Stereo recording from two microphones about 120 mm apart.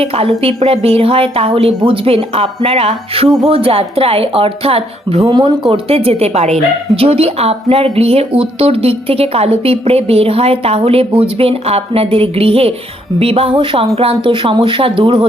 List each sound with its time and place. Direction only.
0.0 s a woman's voice: 50° right (ahead or behind)
5.3 s a woman's voice: 35° right (ahead or behind)